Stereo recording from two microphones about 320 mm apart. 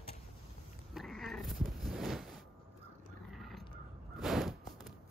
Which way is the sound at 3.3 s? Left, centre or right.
Centre.